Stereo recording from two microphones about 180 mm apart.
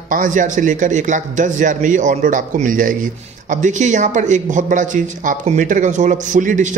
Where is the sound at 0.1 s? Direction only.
45° right (ahead or behind).